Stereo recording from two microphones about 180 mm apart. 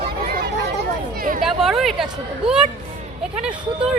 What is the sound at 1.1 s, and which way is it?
Speech, 50° right (ahead or behind).